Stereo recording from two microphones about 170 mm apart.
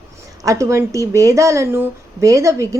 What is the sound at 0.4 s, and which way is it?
A woman's voice, 20° right (ahead or behind).